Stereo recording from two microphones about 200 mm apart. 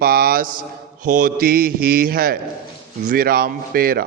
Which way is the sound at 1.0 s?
40° right (ahead or behind).